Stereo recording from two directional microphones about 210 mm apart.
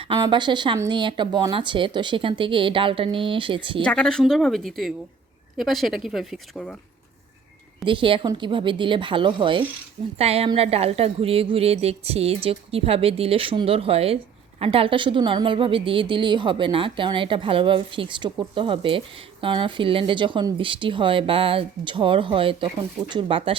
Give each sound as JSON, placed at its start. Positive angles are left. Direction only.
{"t": 0.0, "sound": "a woman's voice", "side_deg": -20}
{"t": 3.8, "sound": "speech", "side_deg": 5}
{"t": 7.9, "sound": "a woman's voice", "side_deg": -25}